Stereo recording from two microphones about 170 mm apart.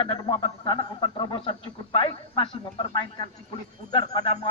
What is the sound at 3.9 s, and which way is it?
Speech, 25° left (ahead or behind).